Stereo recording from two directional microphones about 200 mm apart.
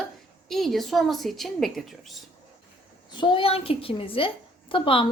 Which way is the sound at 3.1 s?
25° left (ahead or behind).